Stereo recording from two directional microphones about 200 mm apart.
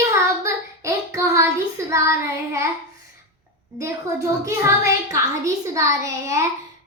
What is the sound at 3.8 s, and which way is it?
A woman's voice, 15° right (ahead or behind).